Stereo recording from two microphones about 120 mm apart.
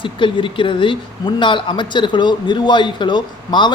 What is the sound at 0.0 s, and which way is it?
Speech, 45° left (ahead or behind).